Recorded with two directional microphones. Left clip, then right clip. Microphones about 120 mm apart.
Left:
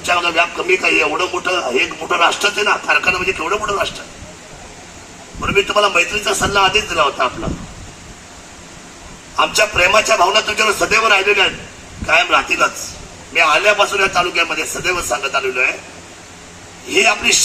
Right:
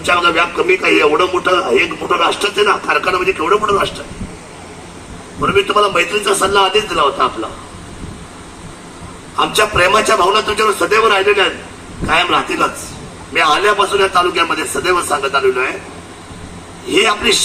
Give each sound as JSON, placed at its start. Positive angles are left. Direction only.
{"t": 0.0, "sound": "a man's voice", "side_deg": 45}
{"t": 5.5, "sound": "a man's voice", "side_deg": 40}
{"t": 9.3, "sound": "a man's voice", "side_deg": 40}
{"t": 16.9, "sound": "a man's voice", "side_deg": 40}